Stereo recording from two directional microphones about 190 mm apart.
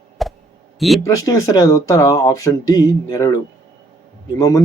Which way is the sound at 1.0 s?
15° left (ahead or behind).